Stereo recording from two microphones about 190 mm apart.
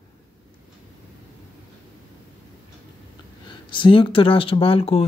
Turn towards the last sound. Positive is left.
turn(degrees=30)  # may be behind; listen again after turning